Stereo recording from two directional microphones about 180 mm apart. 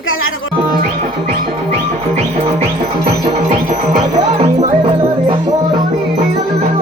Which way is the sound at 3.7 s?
40° right (ahead or behind).